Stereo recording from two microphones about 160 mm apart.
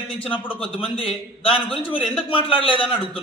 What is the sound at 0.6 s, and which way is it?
Speech, 35° left (ahead or behind).